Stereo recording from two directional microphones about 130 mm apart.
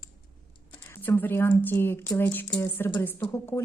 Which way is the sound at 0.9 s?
15° left (ahead or behind).